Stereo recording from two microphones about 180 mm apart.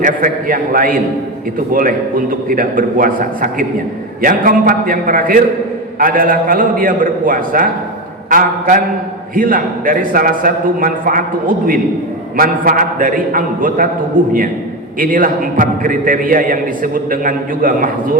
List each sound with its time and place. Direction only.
0.0 s a man's voice: 50° right (ahead or behind)
14.9 s a man's voice: 50° right (ahead or behind)